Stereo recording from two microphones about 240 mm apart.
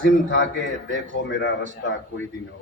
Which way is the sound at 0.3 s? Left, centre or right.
Left.